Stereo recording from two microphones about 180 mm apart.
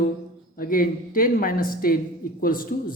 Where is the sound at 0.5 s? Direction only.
50° left (ahead or behind).